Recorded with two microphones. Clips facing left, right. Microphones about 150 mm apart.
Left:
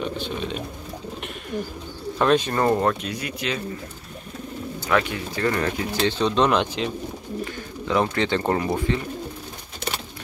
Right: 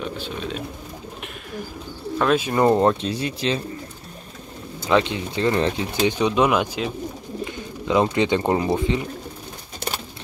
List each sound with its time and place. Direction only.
0.0 s speech: centre (ahead or behind)
2.1 s speech: 5° right (ahead or behind)
2.8 s speech: 30° right (ahead or behind)
4.8 s speech: 20° right (ahead or behind)